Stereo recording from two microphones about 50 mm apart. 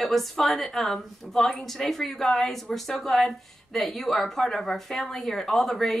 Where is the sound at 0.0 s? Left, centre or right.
Centre.